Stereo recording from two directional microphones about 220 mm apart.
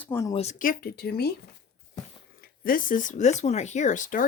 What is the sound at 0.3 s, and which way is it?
Speech, 35° left (ahead or behind).